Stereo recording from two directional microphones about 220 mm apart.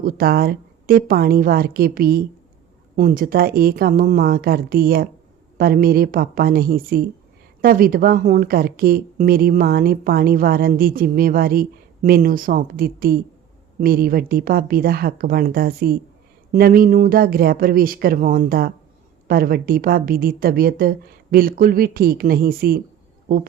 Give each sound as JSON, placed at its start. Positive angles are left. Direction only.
{"t": 0.0, "sound": "a woman's voice", "side_deg": -45}